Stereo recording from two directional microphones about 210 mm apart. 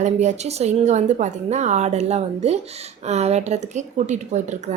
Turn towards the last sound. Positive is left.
turn(degrees=-35)  # may be behind; listen again after turning